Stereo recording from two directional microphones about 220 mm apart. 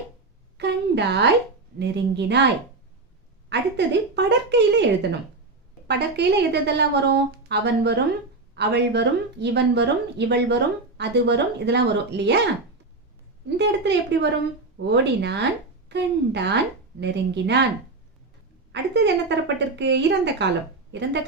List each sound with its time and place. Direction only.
0.5 s a sound: 50° right (ahead or behind)
1.8 s speech: 50° right (ahead or behind)
3.5 s speech: 50° right (ahead or behind)
5.9 s speech: 50° right (ahead or behind)
13.6 s speech: 50° right (ahead or behind)
18.7 s speech: 50° right (ahead or behind)